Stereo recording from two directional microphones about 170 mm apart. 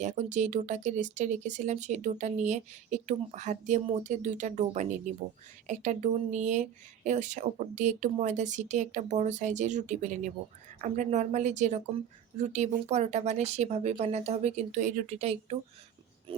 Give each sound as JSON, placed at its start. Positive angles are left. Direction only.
{"t": 0.0, "sound": "speech", "side_deg": -45}